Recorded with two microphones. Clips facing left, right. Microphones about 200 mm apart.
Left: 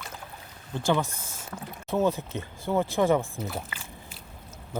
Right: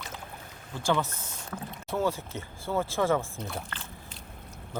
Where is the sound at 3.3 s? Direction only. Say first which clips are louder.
Left 3 dB; 5° left (ahead or behind).